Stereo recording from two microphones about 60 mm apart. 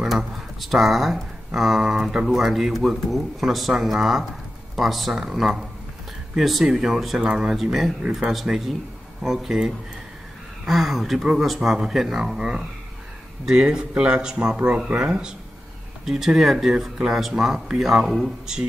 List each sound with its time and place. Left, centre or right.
0.0 s speech: centre